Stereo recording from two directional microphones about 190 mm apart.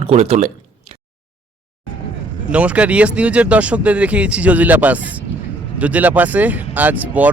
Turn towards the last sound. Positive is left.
turn(degrees=-10)  # may be behind; listen again after turning